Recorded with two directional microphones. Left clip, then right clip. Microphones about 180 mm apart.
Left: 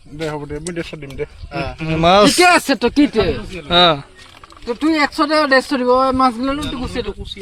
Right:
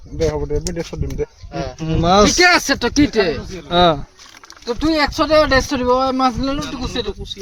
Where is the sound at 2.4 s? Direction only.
45° left (ahead or behind).